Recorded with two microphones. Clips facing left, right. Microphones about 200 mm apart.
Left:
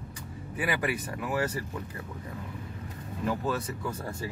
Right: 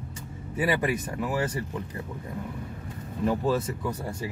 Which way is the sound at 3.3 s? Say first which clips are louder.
Right 5 dB; 30° right (ahead or behind).